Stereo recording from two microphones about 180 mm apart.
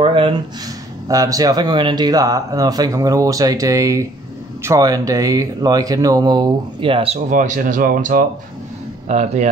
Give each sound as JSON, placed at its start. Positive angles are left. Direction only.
{"t": 0.0, "sound": "speech", "side_deg": -30}
{"t": 7.2, "sound": "speech", "side_deg": -45}
{"t": 9.0, "sound": "a man's voice", "side_deg": -40}